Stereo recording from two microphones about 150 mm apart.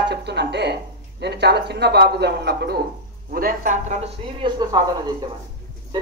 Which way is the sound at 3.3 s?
75° right (ahead or behind).